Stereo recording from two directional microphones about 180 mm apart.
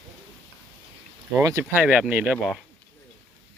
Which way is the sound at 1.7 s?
5° right (ahead or behind).